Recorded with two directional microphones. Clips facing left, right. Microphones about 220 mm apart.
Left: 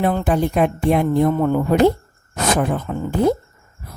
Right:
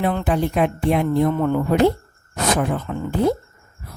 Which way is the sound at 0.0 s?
40° left (ahead or behind).